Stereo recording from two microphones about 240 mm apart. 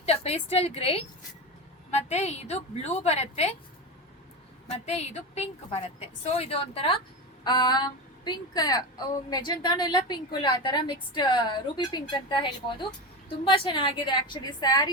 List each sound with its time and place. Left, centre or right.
0.0 s a woman's voice: left
4.7 s a woman's voice: left